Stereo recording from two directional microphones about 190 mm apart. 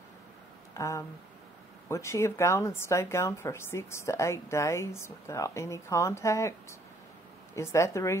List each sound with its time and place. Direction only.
0.7 s a woman's voice: 15° left (ahead or behind)
7.5 s a woman's voice: 15° left (ahead or behind)